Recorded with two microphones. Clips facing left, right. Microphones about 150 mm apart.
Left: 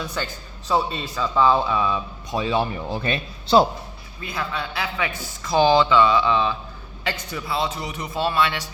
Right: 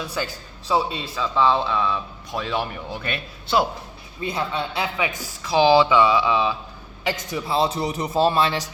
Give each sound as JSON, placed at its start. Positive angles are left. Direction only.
{"t": 0.0, "sound": "a man's voice", "side_deg": -10}
{"t": 2.5, "sound": "a man's voice", "side_deg": 30}
{"t": 4.2, "sound": "a man's voice", "side_deg": -25}
{"t": 5.5, "sound": "a man's voice", "side_deg": -5}
{"t": 7.4, "sound": "a man's voice", "side_deg": -35}